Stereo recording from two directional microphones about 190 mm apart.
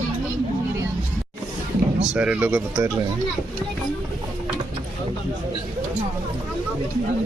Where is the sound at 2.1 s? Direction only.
5° right (ahead or behind).